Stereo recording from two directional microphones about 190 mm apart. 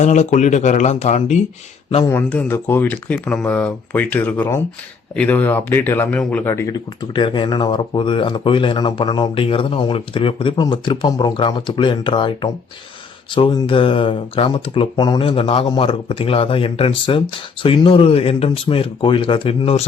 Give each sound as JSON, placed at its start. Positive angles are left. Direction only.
{"t": 0.0, "sound": "speech", "side_deg": 40}
{"t": 2.0, "sound": "speech", "side_deg": 10}
{"t": 7.1, "sound": "speech", "side_deg": 25}